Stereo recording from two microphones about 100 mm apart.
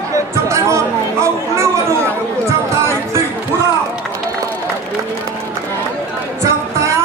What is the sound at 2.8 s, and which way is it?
Music, 30° right (ahead or behind).